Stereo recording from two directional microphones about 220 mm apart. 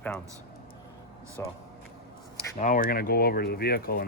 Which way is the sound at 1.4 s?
10° left (ahead or behind).